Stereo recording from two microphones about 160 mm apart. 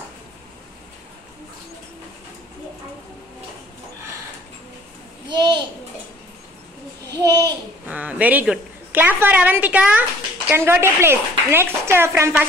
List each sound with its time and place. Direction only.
5.3 s a sound: 25° right (ahead or behind)
7.2 s babbling: 20° right (ahead or behind)
7.9 s a woman's voice: 10° right (ahead or behind)